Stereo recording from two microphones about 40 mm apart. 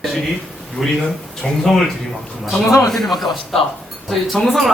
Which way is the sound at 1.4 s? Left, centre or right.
Centre.